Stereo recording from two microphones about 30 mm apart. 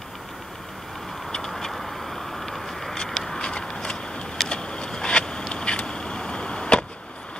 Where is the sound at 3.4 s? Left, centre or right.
Left.